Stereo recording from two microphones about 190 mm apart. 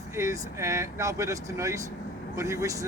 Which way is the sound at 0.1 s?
15° right (ahead or behind).